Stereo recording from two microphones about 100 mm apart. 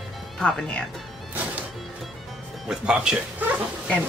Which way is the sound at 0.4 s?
10° left (ahead or behind).